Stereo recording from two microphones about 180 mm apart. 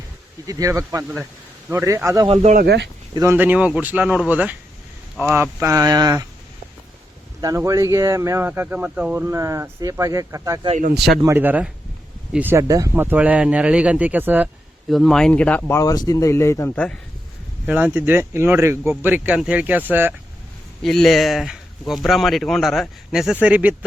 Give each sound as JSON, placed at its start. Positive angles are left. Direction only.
{"t": 0.4, "sound": "speech", "side_deg": -15}
{"t": 2.2, "sound": "speech", "side_deg": -35}
{"t": 2.6, "sound": "speech", "side_deg": -75}
{"t": 3.2, "sound": "speech", "side_deg": -10}
{"t": 7.4, "sound": "speech", "side_deg": -15}
{"t": 10.7, "sound": "speech", "side_deg": -45}
{"t": 11.2, "sound": "speech", "side_deg": -15}
{"t": 17.7, "sound": "speech", "side_deg": -10}
{"t": 20.8, "sound": "speech", "side_deg": 5}